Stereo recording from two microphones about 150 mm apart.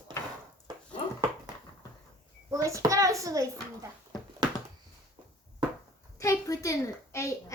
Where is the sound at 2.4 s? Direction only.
20° right (ahead or behind).